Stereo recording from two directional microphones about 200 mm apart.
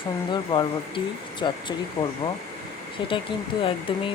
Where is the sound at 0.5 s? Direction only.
25° left (ahead or behind).